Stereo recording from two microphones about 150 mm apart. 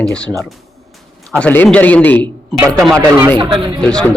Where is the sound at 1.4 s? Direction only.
10° left (ahead or behind).